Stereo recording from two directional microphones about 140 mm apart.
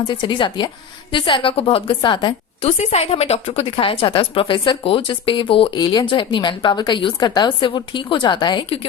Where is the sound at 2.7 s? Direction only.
50° left (ahead or behind).